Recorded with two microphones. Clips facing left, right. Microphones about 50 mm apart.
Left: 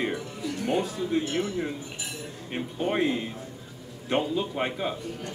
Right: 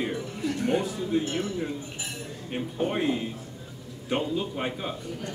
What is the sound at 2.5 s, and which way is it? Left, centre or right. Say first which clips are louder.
Speech: left 1 dB; centre.